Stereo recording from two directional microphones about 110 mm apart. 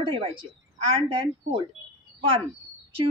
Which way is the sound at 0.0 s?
50° right (ahead or behind).